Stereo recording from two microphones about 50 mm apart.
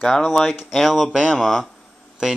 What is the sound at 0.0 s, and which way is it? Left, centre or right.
Speech, centre.